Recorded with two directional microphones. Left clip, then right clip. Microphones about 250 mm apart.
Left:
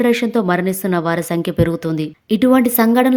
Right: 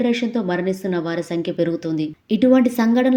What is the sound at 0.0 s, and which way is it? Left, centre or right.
A woman's voice, left.